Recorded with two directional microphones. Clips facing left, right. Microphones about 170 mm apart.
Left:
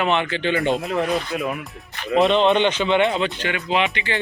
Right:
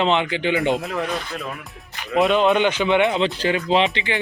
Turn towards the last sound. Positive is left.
turn(degrees=-30)  # may be behind; listen again after turning